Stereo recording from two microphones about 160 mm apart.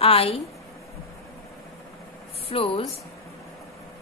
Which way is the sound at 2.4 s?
35° left (ahead or behind).